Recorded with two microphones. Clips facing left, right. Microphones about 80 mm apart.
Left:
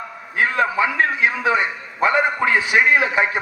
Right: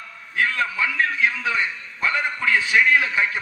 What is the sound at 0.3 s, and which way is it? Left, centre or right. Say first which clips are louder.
A man's voice: left 4 dB; left.